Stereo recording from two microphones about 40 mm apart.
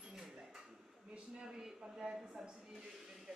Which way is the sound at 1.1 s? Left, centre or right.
Right.